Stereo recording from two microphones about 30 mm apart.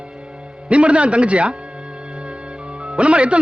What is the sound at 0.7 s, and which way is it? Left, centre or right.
Speech, right.